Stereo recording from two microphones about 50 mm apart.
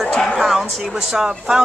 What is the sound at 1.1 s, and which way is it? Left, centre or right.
Speech, centre.